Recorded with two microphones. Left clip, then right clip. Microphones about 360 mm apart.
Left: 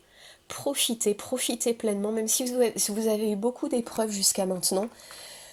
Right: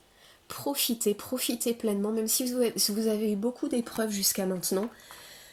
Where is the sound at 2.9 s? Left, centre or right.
Left.